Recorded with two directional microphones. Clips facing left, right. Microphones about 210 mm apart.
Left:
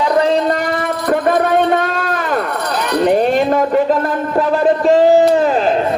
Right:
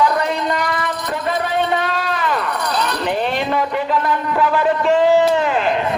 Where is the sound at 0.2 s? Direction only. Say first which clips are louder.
Left 6 dB; 35° left (ahead or behind).